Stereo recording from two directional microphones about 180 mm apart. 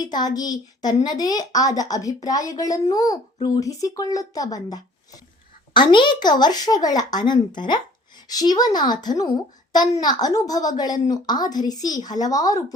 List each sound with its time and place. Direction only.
0.0 s a woman's voice: 20° left (ahead or behind)